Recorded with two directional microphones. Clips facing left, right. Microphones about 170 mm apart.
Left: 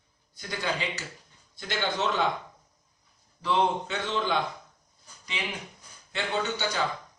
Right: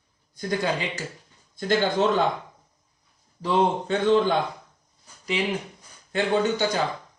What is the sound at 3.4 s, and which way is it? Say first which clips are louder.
Speech: right 4 dB; 45° right (ahead or behind).